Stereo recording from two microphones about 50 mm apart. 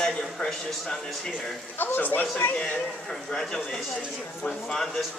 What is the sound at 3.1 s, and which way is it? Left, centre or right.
Speech, centre.